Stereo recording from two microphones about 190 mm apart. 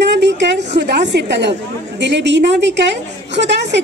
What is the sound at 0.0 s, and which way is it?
A woman's voice, 65° right (ahead or behind).